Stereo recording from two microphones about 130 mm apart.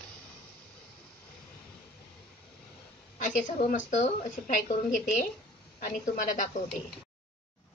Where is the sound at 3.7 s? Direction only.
70° left (ahead or behind).